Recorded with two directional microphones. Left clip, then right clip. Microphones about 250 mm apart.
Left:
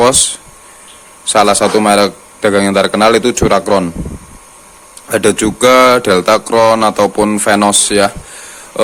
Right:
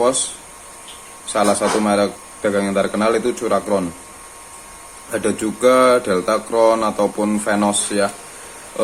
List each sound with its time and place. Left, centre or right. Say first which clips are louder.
1.3 s speech: left 8 dB; left
5.1 s speech: left 9 dB; left